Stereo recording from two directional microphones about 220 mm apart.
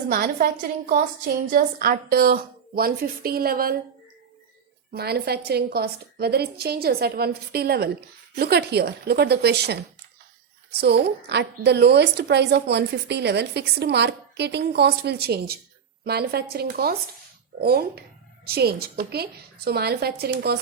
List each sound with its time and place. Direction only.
0.1 s a woman's voice: 40° right (ahead or behind)
1.5 s a woman's voice: 40° right (ahead or behind)
4.9 s a woman's voice: 45° right (ahead or behind)